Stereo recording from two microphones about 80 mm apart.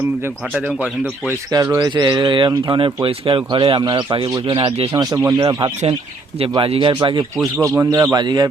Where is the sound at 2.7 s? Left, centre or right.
Right.